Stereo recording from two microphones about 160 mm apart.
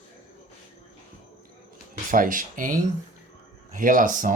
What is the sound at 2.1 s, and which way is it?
Speech, 60° right (ahead or behind).